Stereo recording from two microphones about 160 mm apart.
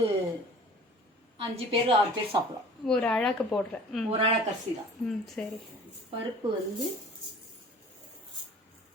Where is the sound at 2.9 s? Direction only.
5° left (ahead or behind).